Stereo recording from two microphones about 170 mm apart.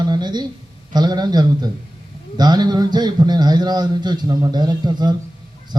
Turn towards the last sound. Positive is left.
turn(degrees=-25)  # may be behind; listen again after turning